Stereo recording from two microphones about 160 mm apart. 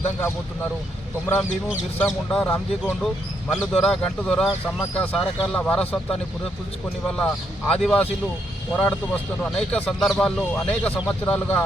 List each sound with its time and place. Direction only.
0.2 s speech: 15° left (ahead or behind)
2.0 s speech: 10° left (ahead or behind)
7.2 s speech: 5° left (ahead or behind)